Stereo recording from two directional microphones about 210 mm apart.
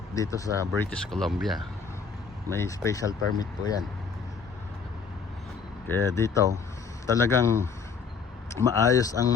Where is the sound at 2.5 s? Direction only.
15° left (ahead or behind).